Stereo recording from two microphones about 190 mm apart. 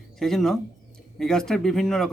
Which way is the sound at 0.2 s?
Centre (ahead or behind).